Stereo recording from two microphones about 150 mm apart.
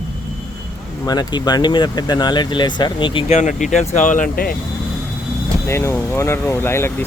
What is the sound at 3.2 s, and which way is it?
Speech, 50° left (ahead or behind).